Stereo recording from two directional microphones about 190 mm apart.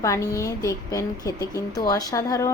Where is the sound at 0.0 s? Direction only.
15° left (ahead or behind).